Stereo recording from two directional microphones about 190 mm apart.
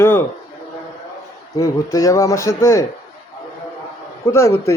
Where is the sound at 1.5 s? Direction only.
15° left (ahead or behind).